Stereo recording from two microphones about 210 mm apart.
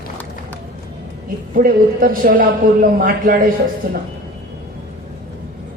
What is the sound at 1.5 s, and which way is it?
Speech, 40° right (ahead or behind).